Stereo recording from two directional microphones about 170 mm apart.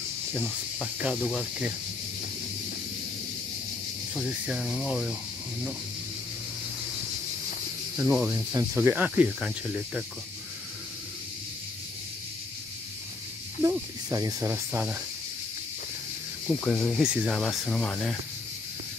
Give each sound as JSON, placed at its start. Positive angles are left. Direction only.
{"t": 1.0, "sound": "speech", "side_deg": 0}
{"t": 4.1, "sound": "speech", "side_deg": -5}
{"t": 8.0, "sound": "snake", "side_deg": -10}
{"t": 13.6, "sound": "snake", "side_deg": -20}
{"t": 16.6, "sound": "speech", "side_deg": 10}
{"t": 17.0, "sound": "speech", "side_deg": -5}